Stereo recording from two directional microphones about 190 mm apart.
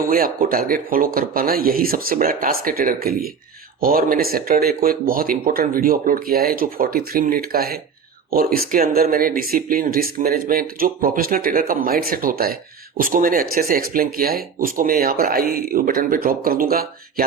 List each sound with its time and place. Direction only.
0.1 s speech: 50° right (ahead or behind)